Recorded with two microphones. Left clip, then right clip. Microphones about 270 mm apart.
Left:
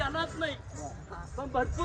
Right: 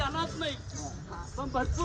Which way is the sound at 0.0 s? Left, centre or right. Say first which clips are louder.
Even; centre.